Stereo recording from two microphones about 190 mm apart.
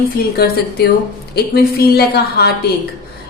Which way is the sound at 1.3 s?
55° left (ahead or behind).